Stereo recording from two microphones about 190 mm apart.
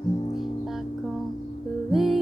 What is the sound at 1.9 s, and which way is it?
Music, centre (ahead or behind).